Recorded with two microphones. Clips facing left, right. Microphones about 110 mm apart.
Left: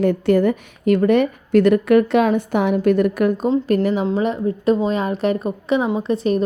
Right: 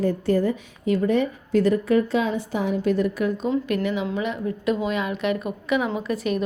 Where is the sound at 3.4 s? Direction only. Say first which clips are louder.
Left 6 dB; 40° left (ahead or behind).